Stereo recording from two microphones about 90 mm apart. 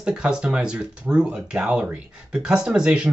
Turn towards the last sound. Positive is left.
turn(degrees=-5)  # may be behind; listen again after turning